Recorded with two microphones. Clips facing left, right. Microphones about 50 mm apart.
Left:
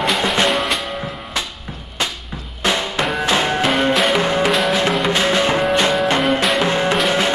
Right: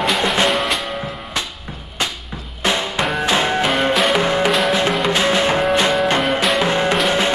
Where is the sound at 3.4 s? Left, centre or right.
Centre.